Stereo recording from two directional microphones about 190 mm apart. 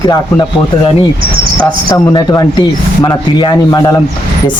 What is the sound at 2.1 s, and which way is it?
Speech, 20° left (ahead or behind).